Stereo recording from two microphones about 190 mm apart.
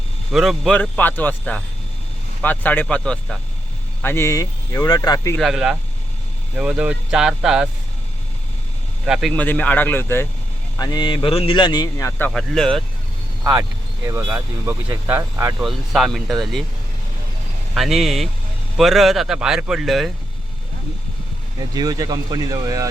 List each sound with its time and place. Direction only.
0.3 s speech: centre (ahead or behind); by 5.4 s 20° left (ahead or behind)
5.4 s speech: 5° right (ahead or behind)
9.0 s speech: centre (ahead or behind); by 12.3 s 15° left (ahead or behind)
12.3 s speech: centre (ahead or behind)
13.4 s speech: 15° right (ahead or behind)
15.6 s speech: centre (ahead or behind)
17.7 s speech: centre (ahead or behind)
21.8 s speech: 20° right (ahead or behind)